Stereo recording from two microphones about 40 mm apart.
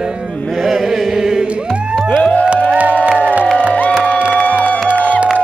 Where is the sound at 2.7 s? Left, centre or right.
Right.